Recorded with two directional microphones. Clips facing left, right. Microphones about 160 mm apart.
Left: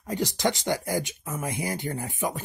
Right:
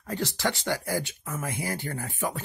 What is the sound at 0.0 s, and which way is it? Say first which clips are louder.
Speech: left 3 dB; 15° left (ahead or behind).